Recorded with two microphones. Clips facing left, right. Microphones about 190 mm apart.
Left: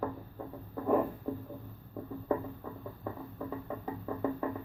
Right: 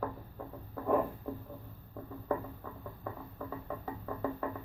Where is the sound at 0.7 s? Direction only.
5° left (ahead or behind).